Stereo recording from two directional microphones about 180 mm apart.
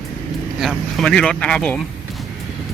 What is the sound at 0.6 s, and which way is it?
Speech, centre (ahead or behind).